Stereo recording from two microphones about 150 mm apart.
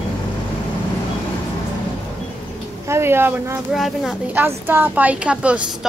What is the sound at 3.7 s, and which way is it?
Speech, centre (ahead or behind).